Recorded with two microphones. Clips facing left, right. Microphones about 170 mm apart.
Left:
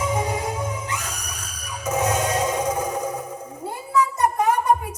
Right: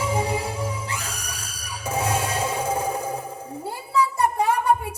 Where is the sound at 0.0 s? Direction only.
30° right (ahead or behind).